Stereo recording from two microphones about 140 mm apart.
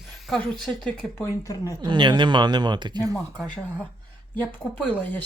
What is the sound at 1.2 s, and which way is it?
Speech, 20° left (ahead or behind).